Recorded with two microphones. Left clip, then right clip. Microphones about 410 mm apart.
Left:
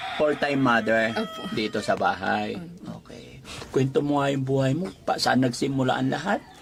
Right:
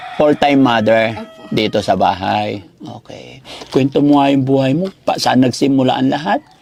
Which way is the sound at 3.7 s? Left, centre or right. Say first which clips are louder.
Right 11 dB; right.